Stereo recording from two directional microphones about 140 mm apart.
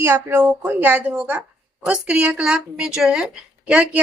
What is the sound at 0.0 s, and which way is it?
A woman's voice, 15° right (ahead or behind).